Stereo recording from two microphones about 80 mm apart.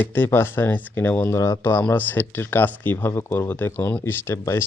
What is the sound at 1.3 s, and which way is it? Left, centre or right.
Speech, left.